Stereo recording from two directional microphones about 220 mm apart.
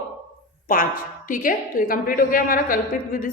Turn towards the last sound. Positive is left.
turn(degrees=40)  # may be behind; listen again after turning